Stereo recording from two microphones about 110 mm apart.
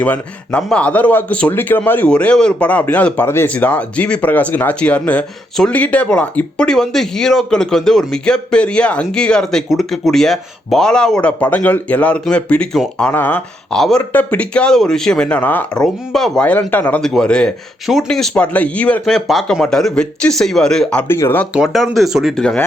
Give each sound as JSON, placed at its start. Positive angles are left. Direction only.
{"t": 0.0, "sound": "speech", "side_deg": 10}
{"t": 13.7, "sound": "speech", "side_deg": 5}
{"t": 21.1, "sound": "speech", "side_deg": 20}
{"t": 21.5, "sound": "speech", "side_deg": 0}